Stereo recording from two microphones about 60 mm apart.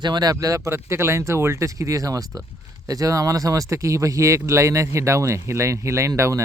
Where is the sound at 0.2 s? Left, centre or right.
Right.